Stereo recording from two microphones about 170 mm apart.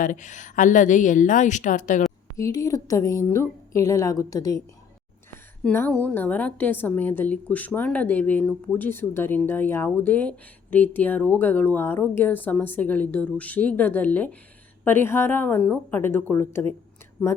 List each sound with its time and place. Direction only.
0.0 s a woman's voice: 50° left (ahead or behind)
2.3 s a woman's voice: 20° left (ahead or behind)
5.6 s a woman's voice: 10° left (ahead or behind)